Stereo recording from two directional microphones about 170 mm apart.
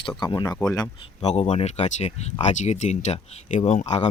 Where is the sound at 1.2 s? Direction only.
40° left (ahead or behind).